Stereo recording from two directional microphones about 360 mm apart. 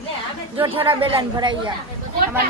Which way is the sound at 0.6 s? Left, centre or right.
Centre.